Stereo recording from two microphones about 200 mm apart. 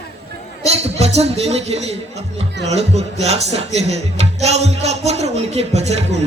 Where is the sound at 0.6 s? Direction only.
30° right (ahead or behind).